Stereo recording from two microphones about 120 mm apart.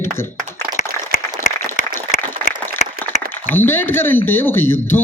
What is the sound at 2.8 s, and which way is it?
Applause, 75° left (ahead or behind).